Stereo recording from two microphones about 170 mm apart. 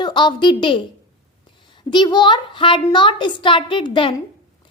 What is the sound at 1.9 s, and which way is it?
A woman's voice, 25° left (ahead or behind).